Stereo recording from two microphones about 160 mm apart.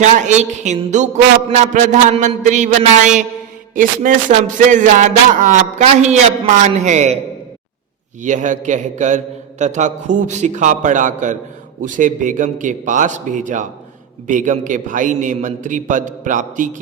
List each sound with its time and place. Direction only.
0.0 s speech: 50° right (ahead or behind)
8.2 s speech: 50° right (ahead or behind)